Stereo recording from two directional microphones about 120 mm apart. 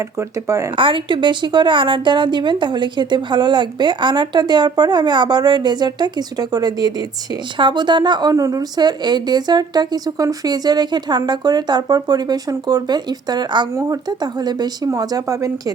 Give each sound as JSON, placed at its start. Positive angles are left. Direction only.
{"t": 0.2, "sound": "a woman's voice", "side_deg": -25}
{"t": 0.8, "sound": "a woman's voice", "side_deg": -45}